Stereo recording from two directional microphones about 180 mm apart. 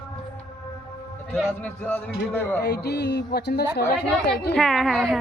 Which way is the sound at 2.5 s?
60° left (ahead or behind).